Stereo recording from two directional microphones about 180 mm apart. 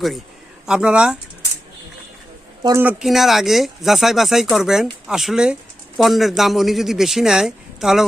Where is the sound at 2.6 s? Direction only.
15° right (ahead or behind).